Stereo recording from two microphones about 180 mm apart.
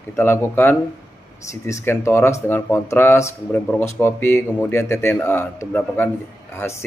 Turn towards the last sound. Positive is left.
turn(degrees=15)  # may be behind; listen again after turning